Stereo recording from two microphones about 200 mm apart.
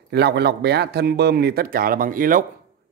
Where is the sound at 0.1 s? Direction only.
55° right (ahead or behind).